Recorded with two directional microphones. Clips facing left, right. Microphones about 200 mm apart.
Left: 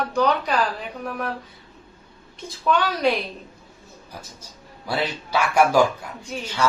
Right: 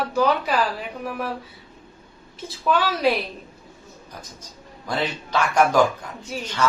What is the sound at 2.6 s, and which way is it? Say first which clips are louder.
Speech: even; 5° right (ahead or behind).